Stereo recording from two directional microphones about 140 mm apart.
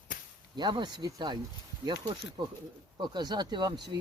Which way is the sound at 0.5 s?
30° right (ahead or behind).